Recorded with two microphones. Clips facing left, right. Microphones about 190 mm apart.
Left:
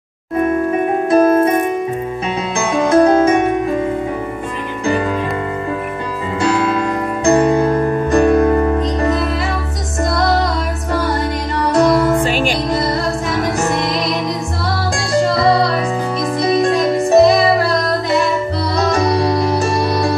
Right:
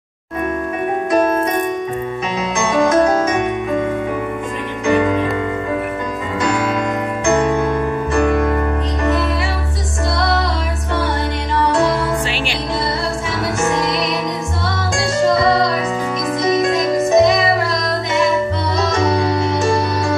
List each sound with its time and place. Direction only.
1.1 s music: 30° left (ahead or behind)
2.9 s music: 30° left (ahead or behind)
7.2 s music: 35° left (ahead or behind)
11.5 s music: 40° left (ahead or behind)
15.3 s music: 35° left (ahead or behind)